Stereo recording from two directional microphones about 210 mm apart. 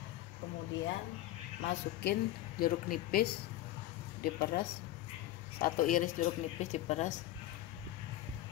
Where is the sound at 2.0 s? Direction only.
45° left (ahead or behind).